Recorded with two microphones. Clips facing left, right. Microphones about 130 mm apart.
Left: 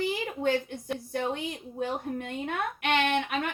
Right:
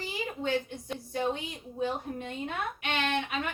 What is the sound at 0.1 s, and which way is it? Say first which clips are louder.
A woman's voice: left 3 dB; 55° left (ahead or behind).